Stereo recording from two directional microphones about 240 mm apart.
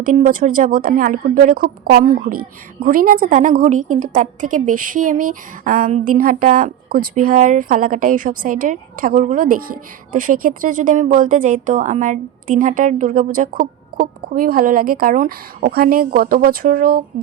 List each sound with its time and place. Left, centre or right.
0.0 s speech: right